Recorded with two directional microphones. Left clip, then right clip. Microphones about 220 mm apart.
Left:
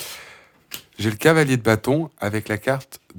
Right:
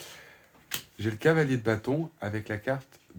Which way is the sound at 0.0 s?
40° left (ahead or behind).